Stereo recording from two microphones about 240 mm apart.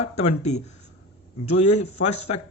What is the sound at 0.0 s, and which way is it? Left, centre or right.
Speech, left.